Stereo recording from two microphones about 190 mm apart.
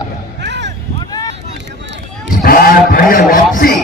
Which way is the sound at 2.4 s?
50° left (ahead or behind).